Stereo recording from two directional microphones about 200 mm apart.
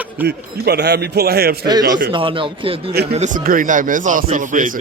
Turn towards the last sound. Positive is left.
turn(degrees=-40)  # may be behind; listen again after turning